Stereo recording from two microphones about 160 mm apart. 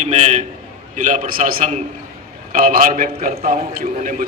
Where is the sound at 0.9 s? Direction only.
50° right (ahead or behind).